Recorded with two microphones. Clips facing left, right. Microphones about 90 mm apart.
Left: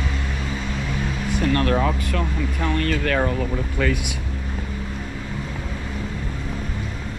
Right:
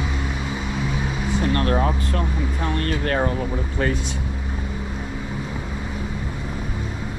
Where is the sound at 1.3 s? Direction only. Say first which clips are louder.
Left 1 dB; 30° right (ahead or behind).